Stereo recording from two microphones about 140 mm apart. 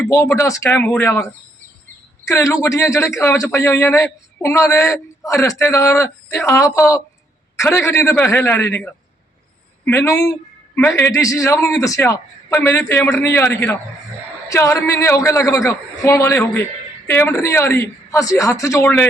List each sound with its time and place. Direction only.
0.3 s a man's voice: 20° left (ahead or behind)
2.2 s a man's voice: 20° left (ahead or behind)
7.5 s a sound: 20° left (ahead or behind)
7.9 s a man's voice: 15° left (ahead or behind)